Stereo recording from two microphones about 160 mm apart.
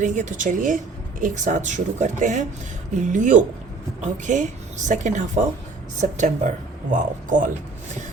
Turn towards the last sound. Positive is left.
turn(degrees=-55)  # may be behind; listen again after turning